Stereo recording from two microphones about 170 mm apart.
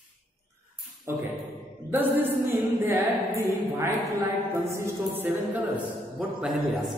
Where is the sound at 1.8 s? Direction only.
15° right (ahead or behind).